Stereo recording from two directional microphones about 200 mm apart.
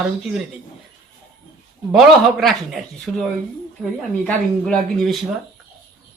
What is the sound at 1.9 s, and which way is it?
Speech, centre (ahead or behind).